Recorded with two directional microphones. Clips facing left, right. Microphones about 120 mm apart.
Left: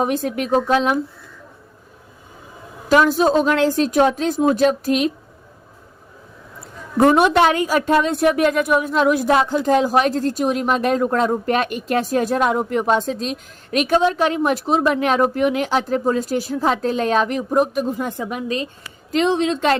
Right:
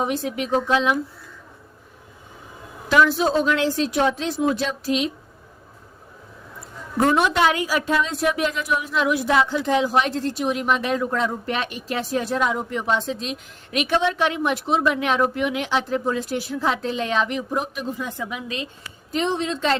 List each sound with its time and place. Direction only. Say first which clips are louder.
0.0 s a woman's voice: left 4 dB; 50° left (ahead or behind)
2.9 s a woman's voice: left 4 dB; 45° left (ahead or behind)
7.0 s a woman's voice: left 5 dB; 55° left (ahead or behind); by 18.7 s 40° left (ahead or behind)
19.1 s a woman's voice: left 6 dB; 90° left; by 19.8 s 55° left (ahead or behind)